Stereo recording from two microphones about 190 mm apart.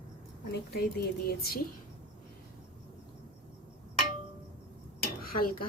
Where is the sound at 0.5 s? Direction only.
55° left (ahead or behind).